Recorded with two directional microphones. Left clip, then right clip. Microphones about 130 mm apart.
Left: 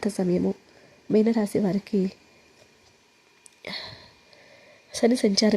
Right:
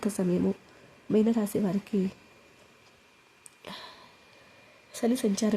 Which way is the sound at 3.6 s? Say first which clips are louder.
Left 7 dB; 35° left (ahead or behind).